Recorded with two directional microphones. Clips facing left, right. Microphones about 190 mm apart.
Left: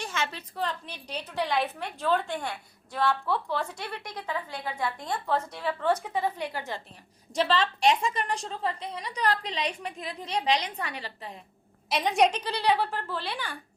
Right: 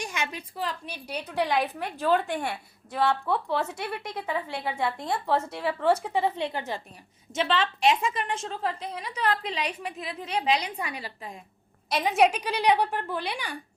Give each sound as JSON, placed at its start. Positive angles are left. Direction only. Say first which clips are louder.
{"t": 0.0, "sound": "a woman's voice", "louder": "even", "side_deg": -15}
{"t": 7.3, "sound": "a woman's voice", "louder": "left 1 dB", "side_deg": -5}